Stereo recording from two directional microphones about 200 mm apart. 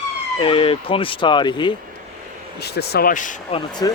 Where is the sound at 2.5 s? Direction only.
55° left (ahead or behind); by 3.6 s 40° left (ahead or behind).